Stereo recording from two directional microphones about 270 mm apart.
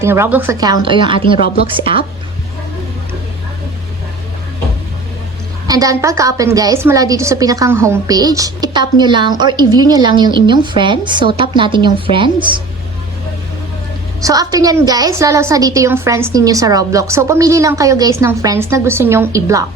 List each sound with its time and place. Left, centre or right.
0.0 s a woman's voice: centre
5.6 s a woman's voice: centre
14.2 s a woman's voice: centre